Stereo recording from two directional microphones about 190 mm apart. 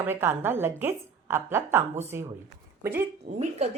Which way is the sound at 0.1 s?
10° right (ahead or behind).